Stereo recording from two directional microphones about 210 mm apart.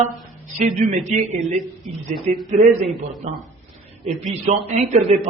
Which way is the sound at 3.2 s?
30° right (ahead or behind).